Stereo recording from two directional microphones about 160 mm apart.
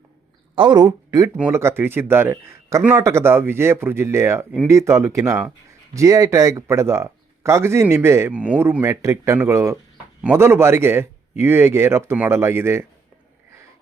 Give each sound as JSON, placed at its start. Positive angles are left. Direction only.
{"t": 0.5, "sound": "a man's voice", "side_deg": -30}